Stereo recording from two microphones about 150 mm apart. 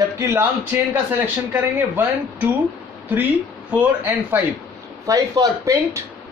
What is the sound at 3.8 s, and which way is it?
Speech, 10° right (ahead or behind).